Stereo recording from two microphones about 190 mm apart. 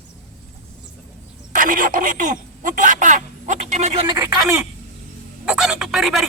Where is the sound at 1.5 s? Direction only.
45° right (ahead or behind).